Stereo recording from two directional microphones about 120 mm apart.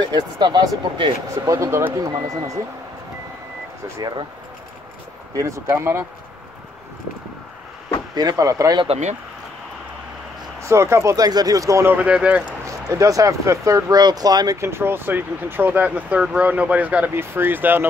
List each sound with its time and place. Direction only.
0.1 s speech: 35° right (ahead or behind)
1.4 s speech: 25° right (ahead or behind)
2.2 s speech: 65° right (ahead or behind)
5.3 s speech: 25° right (ahead or behind)
8.1 s speech: 35° right (ahead or behind)
8.8 s speech: 65° right (ahead or behind)
10.6 s speech: 25° right (ahead or behind)
12.6 s speech: 25° right (ahead or behind)